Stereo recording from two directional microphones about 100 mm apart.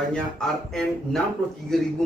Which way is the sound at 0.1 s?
5° left (ahead or behind).